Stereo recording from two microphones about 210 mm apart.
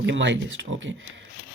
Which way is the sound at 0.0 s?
60° right (ahead or behind).